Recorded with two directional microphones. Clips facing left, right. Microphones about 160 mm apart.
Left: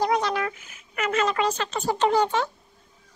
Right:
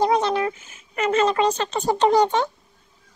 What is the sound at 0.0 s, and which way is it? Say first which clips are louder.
Speech: right 4 dB; 25° right (ahead or behind).